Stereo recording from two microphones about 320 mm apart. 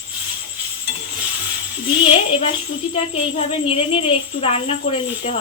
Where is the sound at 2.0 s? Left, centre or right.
Centre.